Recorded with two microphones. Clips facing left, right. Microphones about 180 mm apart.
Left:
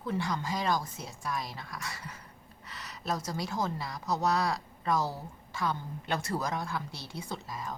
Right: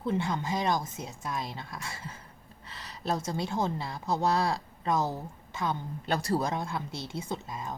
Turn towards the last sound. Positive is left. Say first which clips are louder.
# right 2 dB
turn(degrees=-20)  # may be behind; listen again after turning